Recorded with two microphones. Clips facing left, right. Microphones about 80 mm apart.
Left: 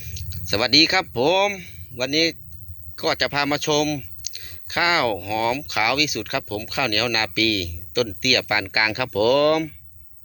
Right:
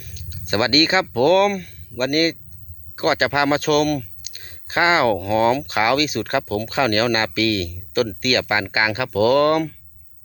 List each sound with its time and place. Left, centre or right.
0.0 s speech: right